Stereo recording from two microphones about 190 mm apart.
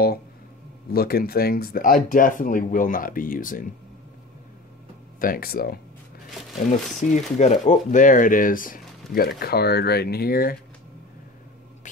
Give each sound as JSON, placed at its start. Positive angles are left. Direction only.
{"t": 0.9, "sound": "speech", "side_deg": 55}
{"t": 5.2, "sound": "speech", "side_deg": 50}
{"t": 7.1, "sound": "speech", "side_deg": 40}